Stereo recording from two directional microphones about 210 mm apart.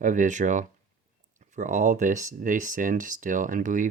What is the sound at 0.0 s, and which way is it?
Speech, 35° right (ahead or behind).